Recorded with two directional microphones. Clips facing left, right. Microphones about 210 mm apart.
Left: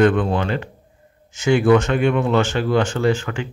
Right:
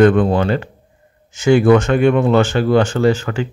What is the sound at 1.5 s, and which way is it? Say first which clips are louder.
Speech: right 4 dB; 50° right (ahead or behind).